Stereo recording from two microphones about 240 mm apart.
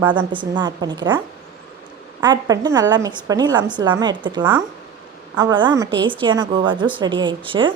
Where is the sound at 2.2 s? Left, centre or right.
Centre.